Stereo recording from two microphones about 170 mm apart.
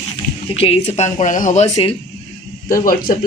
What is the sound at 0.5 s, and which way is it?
Speech, 35° left (ahead or behind).